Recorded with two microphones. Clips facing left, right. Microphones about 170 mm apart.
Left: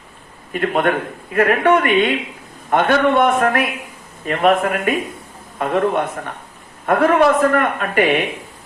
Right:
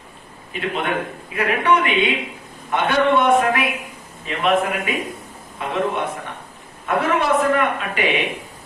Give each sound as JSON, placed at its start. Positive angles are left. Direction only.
{"t": 0.5, "sound": "a man's voice", "side_deg": 50}